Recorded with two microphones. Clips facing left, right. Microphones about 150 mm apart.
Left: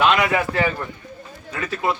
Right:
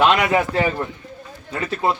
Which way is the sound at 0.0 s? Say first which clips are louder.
Right 2 dB; 30° right (ahead or behind).